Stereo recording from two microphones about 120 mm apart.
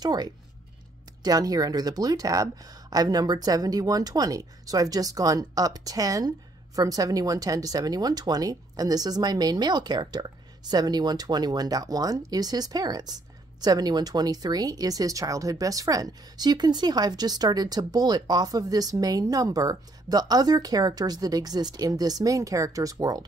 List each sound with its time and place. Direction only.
0.0 s speech: 35° right (ahead or behind)